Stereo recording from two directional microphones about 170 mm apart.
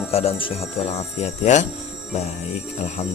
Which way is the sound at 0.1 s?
35° left (ahead or behind).